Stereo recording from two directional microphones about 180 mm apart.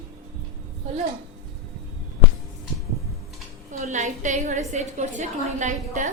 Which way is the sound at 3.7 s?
40° right (ahead or behind).